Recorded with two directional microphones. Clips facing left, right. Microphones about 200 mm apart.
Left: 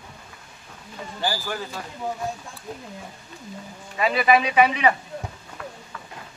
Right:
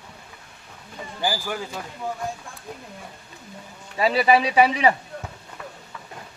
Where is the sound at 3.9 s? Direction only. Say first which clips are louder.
Right 1 dB; 30° right (ahead or behind).